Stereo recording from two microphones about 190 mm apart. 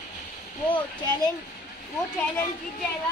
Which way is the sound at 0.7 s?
20° left (ahead or behind).